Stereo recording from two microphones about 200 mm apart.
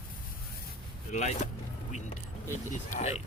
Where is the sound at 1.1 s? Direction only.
35° left (ahead or behind).